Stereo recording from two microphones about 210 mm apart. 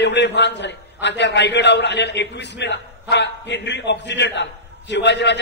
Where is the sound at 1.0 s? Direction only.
55° left (ahead or behind).